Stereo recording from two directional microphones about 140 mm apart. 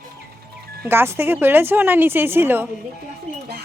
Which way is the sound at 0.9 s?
15° right (ahead or behind).